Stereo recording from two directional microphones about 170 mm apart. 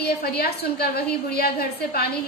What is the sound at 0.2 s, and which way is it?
A woman's voice, 65° left (ahead or behind).